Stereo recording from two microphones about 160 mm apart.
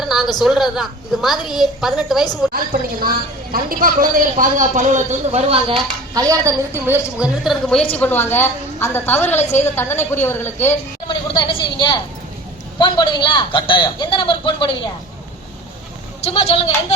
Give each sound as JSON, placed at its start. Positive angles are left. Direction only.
{"t": 0.0, "sound": "a sound", "side_deg": 0}
{"t": 0.3, "sound": "a woman's voice", "side_deg": 0}
{"t": 3.5, "sound": "a man's voice", "side_deg": -65}
{"t": 5.5, "sound": "speech", "side_deg": -35}
{"t": 6.1, "sound": "a woman's voice", "side_deg": -20}
{"t": 7.4, "sound": "a woman's voice", "side_deg": 0}
{"t": 7.9, "sound": "a woman's voice", "side_deg": 10}
{"t": 11.1, "sound": "a man's voice", "side_deg": 30}
{"t": 16.2, "sound": "speech", "side_deg": 40}